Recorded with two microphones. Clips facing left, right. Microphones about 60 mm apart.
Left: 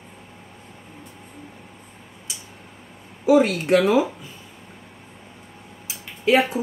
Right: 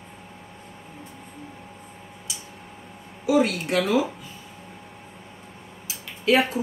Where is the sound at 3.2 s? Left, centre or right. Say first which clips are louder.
Left 4 dB; left.